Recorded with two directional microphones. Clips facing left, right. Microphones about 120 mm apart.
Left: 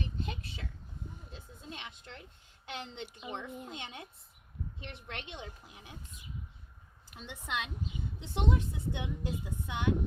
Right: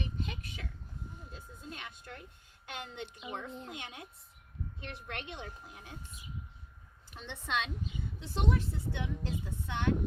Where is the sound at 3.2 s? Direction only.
25° left (ahead or behind).